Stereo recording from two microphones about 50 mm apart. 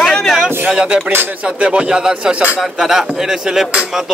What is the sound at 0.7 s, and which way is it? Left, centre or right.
A man's voice, centre.